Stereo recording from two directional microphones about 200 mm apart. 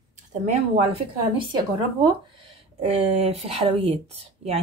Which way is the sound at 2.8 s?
30° right (ahead or behind).